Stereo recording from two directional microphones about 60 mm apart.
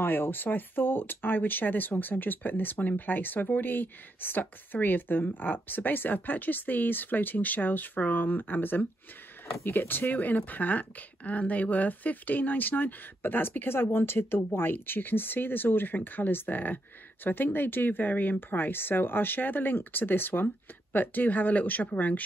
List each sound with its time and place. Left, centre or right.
0.0 s speech: left